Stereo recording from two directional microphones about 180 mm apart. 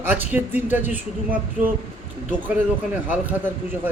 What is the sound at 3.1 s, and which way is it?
Speech, 10° right (ahead or behind).